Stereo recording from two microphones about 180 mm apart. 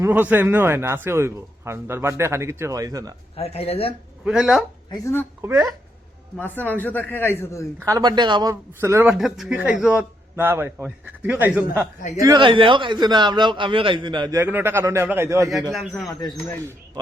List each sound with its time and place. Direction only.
0.0 s speech: 10° right (ahead or behind)
3.3 s speech: 35° left (ahead or behind)
4.2 s speech: 5° right (ahead or behind)
4.9 s a man's voice: 15° left (ahead or behind)
5.4 s speech: 15° right (ahead or behind)
6.3 s a man's voice: 10° left (ahead or behind)
7.8 s a man's voice: 20° right (ahead or behind)
9.1 s speech: centre (ahead or behind)
12.1 s a man's voice: 20° right (ahead or behind)
15.7 s a man's voice: centre (ahead or behind)